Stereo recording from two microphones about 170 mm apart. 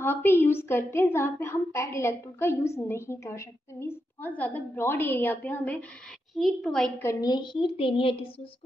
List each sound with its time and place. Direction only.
0.0 s a woman's voice: 10° left (ahead or behind)
7.0 s a woman's voice: 20° left (ahead or behind)